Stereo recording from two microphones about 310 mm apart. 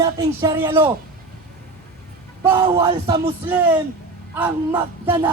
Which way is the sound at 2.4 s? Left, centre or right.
Centre.